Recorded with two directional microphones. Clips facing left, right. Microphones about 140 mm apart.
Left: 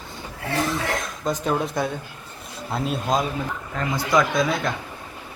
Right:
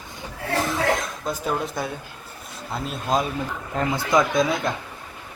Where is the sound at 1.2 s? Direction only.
Centre (ahead or behind).